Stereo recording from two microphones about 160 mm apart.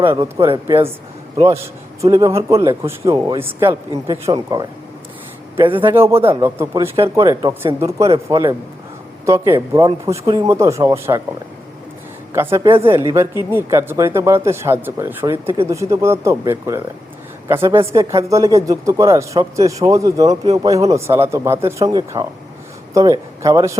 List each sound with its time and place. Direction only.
0.7 s speech: 15° right (ahead or behind)
5.6 s a man's voice: 30° right (ahead or behind)
5.9 s speech: 15° right (ahead or behind)
12.3 s speech: 15° right (ahead or behind)